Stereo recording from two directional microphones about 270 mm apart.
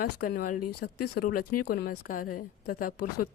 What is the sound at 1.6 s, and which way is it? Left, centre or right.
A woman's voice, left.